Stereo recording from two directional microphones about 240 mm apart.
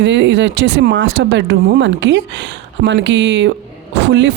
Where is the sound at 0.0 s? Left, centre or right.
Right.